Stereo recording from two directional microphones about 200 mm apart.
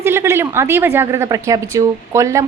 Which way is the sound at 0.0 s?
15° right (ahead or behind).